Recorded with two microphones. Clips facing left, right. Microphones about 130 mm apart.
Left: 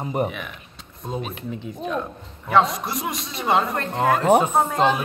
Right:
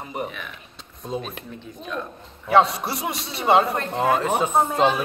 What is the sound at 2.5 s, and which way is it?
A man's voice, 30° right (ahead or behind).